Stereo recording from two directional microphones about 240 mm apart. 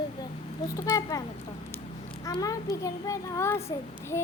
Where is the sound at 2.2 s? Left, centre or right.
Centre.